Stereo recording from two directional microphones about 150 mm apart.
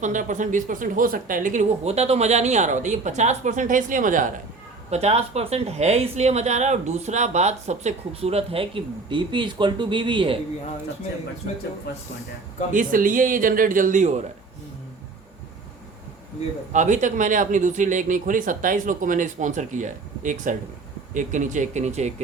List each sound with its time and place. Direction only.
0.0 s speech: 55° right (ahead or behind)
4.9 s speech: 45° right (ahead or behind)
12.7 s speech: 65° right (ahead or behind)
16.7 s speech: 55° right (ahead or behind)